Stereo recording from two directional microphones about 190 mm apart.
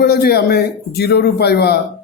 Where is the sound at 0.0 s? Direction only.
55° left (ahead or behind).